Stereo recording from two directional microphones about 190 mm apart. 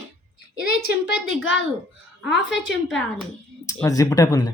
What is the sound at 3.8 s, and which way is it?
Speech, 20° left (ahead or behind).